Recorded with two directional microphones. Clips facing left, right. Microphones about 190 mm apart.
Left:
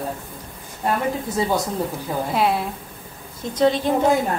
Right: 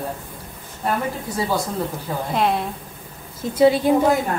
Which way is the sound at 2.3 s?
5° left (ahead or behind).